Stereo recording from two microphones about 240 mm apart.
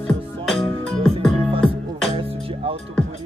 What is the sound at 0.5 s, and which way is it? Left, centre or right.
Music, centre.